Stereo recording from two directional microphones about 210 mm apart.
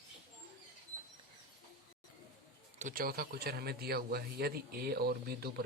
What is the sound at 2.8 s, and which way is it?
A man's voice, 40° right (ahead or behind).